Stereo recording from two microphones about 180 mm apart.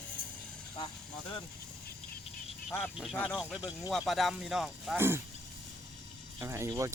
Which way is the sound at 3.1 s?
5° left (ahead or behind).